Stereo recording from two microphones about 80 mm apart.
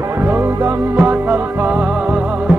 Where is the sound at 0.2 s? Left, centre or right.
Right.